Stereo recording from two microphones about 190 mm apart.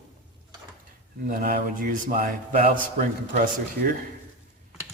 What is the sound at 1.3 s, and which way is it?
A man's voice, 50° right (ahead or behind).